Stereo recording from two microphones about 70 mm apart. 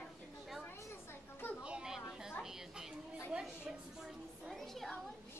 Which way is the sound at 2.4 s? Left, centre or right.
Centre.